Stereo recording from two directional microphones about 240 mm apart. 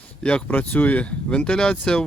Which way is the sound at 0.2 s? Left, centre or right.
Centre.